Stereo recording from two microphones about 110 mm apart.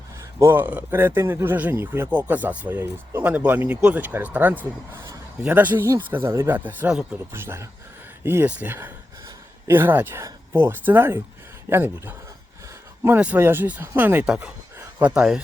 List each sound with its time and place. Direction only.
0.3 s speech: 20° right (ahead or behind)